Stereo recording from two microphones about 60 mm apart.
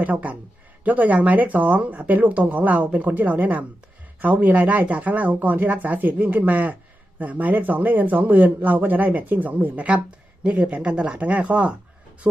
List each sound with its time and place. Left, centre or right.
0.0 s speech: right